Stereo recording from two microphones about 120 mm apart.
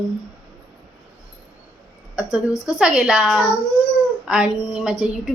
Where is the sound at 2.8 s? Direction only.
5° right (ahead or behind).